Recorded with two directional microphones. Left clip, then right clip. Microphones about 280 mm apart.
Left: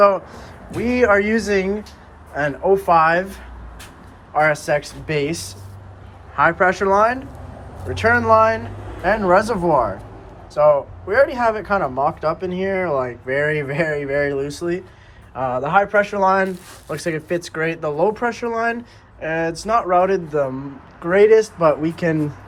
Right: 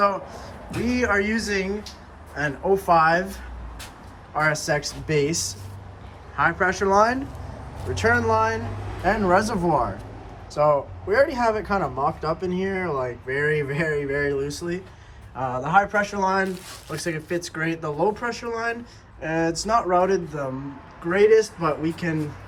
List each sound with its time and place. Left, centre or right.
0.0 s a sound: centre
0.9 s speech: centre
4.4 s speech: centre